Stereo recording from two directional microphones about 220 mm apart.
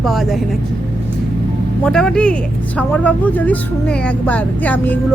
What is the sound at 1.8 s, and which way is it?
Speech, 5° left (ahead or behind).